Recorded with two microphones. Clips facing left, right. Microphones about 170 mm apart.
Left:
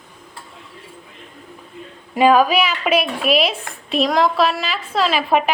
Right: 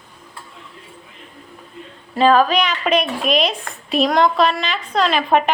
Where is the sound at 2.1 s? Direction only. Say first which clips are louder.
Left 1 dB; 10° left (ahead or behind).